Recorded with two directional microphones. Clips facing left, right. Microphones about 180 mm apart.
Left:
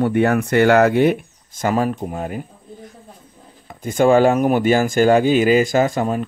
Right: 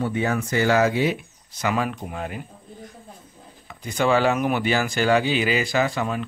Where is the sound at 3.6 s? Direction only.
45° left (ahead or behind).